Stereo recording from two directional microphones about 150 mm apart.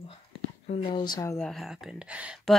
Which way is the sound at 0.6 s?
35° left (ahead or behind).